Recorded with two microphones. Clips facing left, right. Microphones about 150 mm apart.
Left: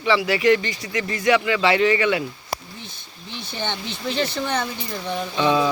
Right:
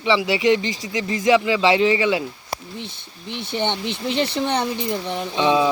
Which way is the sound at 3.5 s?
20° right (ahead or behind).